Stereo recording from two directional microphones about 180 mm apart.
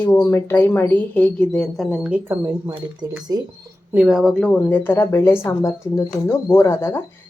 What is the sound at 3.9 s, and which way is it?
A woman's voice, 5° right (ahead or behind).